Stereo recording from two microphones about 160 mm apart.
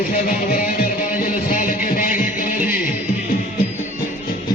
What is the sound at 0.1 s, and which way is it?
Music, 55° left (ahead or behind).